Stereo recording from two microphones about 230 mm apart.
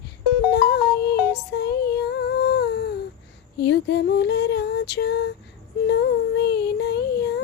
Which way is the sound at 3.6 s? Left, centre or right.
Left.